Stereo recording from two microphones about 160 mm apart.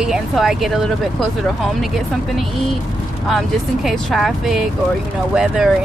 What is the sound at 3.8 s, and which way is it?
Speech, centre (ahead or behind).